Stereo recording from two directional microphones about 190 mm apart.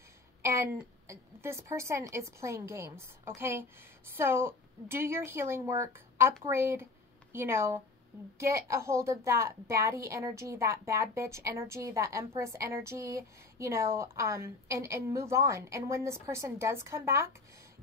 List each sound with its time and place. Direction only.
0.4 s a woman's voice: 15° right (ahead or behind)